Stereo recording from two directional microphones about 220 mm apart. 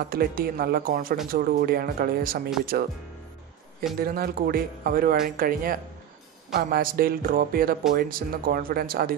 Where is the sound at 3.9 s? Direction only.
45° right (ahead or behind).